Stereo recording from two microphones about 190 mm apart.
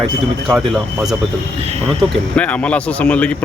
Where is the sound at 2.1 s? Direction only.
5° left (ahead or behind).